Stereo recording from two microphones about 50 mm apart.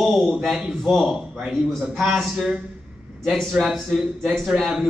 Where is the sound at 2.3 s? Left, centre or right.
Centre.